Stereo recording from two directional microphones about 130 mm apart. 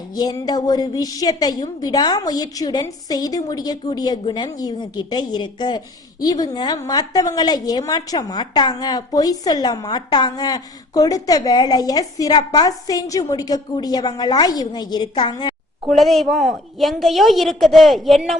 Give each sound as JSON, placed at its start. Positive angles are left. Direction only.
{"t": 0.1, "sound": "a woman's voice", "side_deg": 30}
{"t": 15.9, "sound": "a woman's voice", "side_deg": 0}